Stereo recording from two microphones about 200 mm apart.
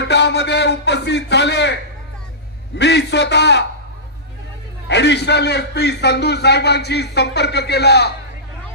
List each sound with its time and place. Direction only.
0.0 s a sound: 60° left (ahead or behind)
2.8 s a man's voice: 60° left (ahead or behind)
4.8 s a man's voice: 60° left (ahead or behind)